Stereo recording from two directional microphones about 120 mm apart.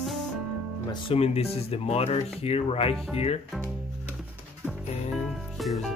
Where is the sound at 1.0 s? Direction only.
55° left (ahead or behind).